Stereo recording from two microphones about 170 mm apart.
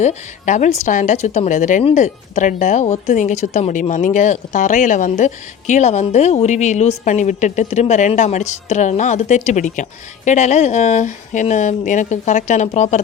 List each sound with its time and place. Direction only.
0.0 s speech: 45° left (ahead or behind)